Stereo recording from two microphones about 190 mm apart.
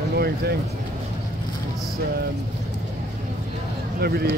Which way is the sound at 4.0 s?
55° right (ahead or behind).